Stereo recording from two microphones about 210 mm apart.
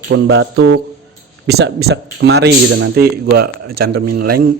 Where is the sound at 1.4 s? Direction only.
55° right (ahead or behind).